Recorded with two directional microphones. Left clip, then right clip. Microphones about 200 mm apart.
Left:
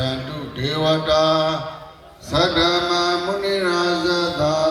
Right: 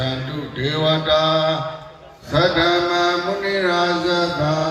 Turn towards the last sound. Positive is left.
turn(degrees=60)  # may be behind; listen again after turning